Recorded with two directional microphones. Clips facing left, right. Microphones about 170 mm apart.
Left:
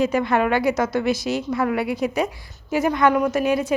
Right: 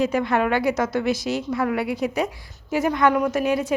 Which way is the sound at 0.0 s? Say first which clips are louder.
Left 1 dB; 10° left (ahead or behind).